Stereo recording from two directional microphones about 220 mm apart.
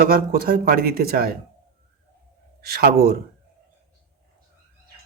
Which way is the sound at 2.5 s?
45° right (ahead or behind).